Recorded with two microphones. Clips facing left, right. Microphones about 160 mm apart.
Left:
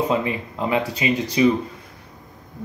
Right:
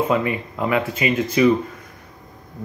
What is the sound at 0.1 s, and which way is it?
Speech, 30° left (ahead or behind).